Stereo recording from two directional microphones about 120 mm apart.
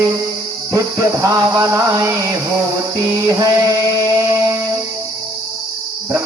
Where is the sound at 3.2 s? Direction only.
25° right (ahead or behind).